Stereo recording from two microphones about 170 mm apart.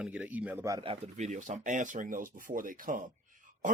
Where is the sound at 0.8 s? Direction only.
35° right (ahead or behind).